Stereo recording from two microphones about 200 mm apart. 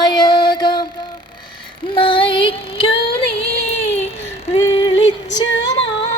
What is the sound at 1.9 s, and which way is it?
Child singing, 25° left (ahead or behind).